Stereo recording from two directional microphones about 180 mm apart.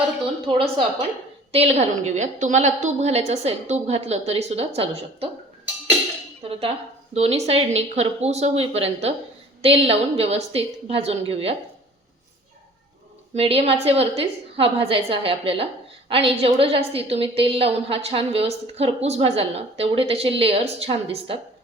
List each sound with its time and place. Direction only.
1.5 s a woman's voice: 35° right (ahead or behind)
6.5 s a woman's voice: 30° right (ahead or behind)
13.3 s a woman's voice: 35° right (ahead or behind)